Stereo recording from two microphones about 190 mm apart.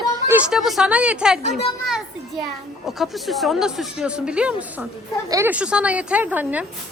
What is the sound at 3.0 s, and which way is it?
A woman's voice, centre (ahead or behind).